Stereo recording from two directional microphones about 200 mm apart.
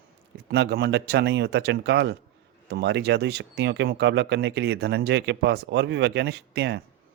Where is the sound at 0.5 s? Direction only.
55° right (ahead or behind).